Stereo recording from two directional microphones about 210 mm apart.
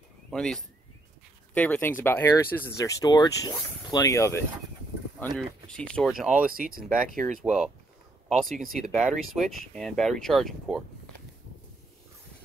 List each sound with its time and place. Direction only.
0.3 s speech: 5° left (ahead or behind)
6.5 s speech: 45° right (ahead or behind)
7.4 s speech: 5° right (ahead or behind)